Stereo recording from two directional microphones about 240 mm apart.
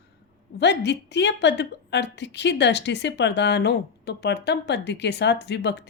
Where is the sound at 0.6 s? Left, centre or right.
Left.